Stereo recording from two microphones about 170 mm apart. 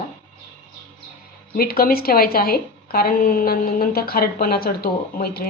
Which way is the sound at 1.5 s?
60° left (ahead or behind).